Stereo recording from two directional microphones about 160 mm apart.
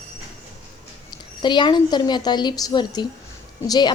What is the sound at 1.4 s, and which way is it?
A woman's voice, 30° left (ahead or behind).